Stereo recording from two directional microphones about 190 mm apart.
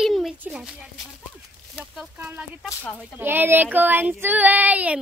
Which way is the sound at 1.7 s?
10° right (ahead or behind).